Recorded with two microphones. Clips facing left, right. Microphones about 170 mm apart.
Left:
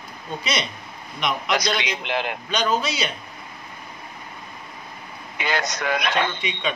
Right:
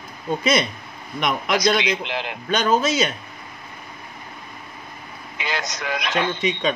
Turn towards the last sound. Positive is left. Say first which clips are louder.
# right 7 dB
turn(degrees=-45)  # may be behind; listen again after turning